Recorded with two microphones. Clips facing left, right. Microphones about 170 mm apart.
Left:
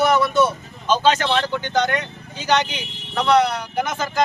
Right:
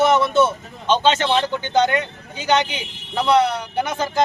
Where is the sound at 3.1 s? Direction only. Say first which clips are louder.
Even; 25° right (ahead or behind).